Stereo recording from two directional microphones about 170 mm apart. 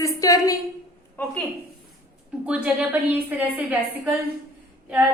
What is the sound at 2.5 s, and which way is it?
A woman's voice, 5° right (ahead or behind).